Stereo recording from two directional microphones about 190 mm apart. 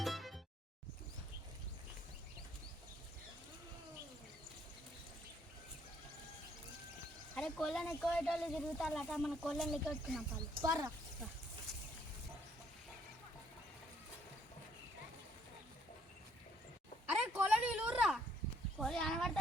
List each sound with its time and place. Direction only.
0.0 s music: centre (ahead or behind)
7.3 s speech: 5° left (ahead or behind)
10.5 s speech: 20° right (ahead or behind)
17.1 s a sound: 10° right (ahead or behind)